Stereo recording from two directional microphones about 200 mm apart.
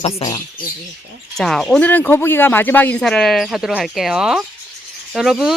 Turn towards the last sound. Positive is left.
turn(degrees=0)  # may be behind; listen again after turning